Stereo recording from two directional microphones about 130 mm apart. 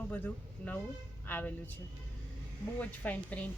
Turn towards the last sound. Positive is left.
turn(degrees=10)  # may be behind; listen again after turning